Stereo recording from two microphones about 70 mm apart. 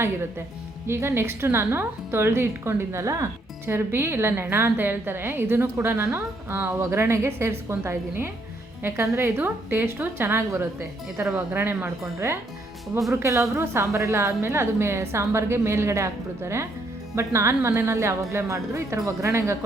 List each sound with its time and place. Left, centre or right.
0.9 s a woman's voice: right
13.2 s a woman's voice: right